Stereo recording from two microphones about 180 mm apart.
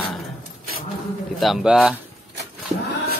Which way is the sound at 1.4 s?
Centre (ahead or behind).